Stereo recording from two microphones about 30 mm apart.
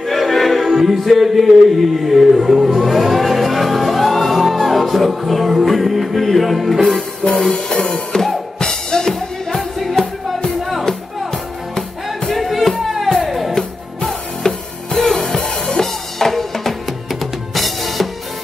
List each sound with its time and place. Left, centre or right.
0.0 s choir: centre
0.7 s music: centre
7.4 s music: left
9.6 s music: centre
12.3 s music: centre
14.4 s music: left
15.0 s music: centre
15.2 s drum kit: centre